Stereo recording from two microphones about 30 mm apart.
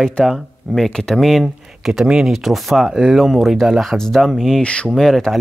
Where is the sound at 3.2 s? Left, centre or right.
Centre.